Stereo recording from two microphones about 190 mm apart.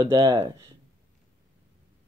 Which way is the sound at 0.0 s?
20° right (ahead or behind).